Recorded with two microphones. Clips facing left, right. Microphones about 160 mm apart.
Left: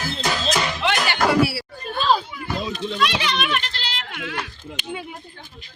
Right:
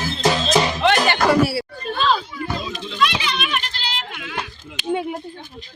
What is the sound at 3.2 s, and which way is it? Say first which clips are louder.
Goat: left 1 dB; 60° left (ahead or behind).